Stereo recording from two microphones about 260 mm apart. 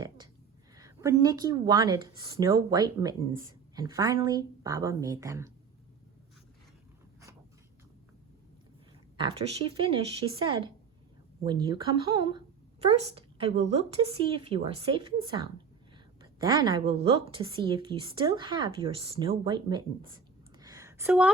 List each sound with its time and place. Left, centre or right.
0.8 s speech: centre
9.1 s a woman's voice: right
20.6 s a sound: centre